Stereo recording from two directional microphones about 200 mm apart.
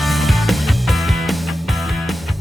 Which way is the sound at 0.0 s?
Centre (ahead or behind).